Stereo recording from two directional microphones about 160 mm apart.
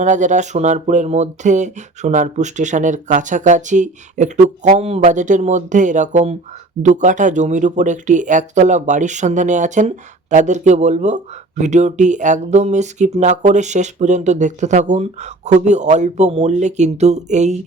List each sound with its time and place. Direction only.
0.0 s speech: 50° right (ahead or behind)